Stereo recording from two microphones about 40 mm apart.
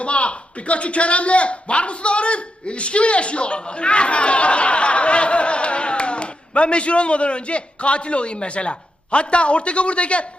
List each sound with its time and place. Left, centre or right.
0.0 s speech: left